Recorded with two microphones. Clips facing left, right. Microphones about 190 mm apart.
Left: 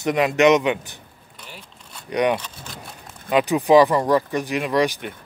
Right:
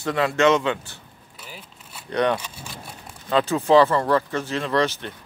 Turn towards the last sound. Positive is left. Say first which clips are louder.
# left 2 dB
turn(degrees=15)  # may be behind; listen again after turning